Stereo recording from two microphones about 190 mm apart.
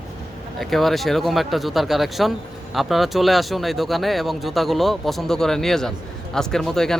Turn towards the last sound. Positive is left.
turn(degrees=0)  # may be behind; listen again after turning